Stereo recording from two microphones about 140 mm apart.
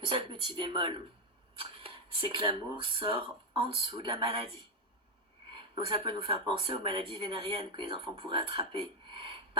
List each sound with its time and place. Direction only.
0.0 s speech: 35° right (ahead or behind)
5.5 s speech: 35° right (ahead or behind)